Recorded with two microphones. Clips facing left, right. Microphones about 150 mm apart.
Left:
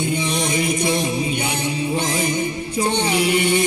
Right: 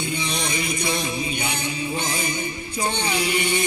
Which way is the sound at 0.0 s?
55° left (ahead or behind).